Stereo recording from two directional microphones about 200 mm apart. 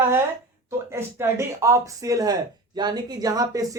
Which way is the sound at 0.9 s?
15° right (ahead or behind).